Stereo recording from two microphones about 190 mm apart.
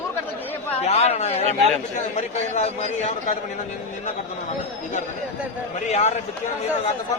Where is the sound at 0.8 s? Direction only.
35° left (ahead or behind).